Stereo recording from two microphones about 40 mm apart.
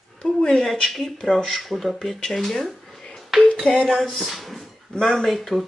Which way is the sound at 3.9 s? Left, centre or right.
Centre.